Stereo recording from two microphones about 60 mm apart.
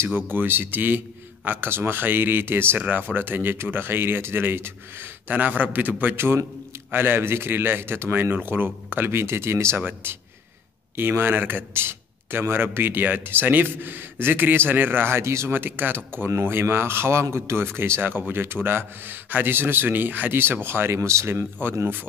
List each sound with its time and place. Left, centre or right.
0.0 s a man's voice: right
5.3 s a man's voice: right
6.1 s a man's voice: right
9.8 s a man's voice: right
15.5 s a man's voice: right
21.5 s a man's voice: right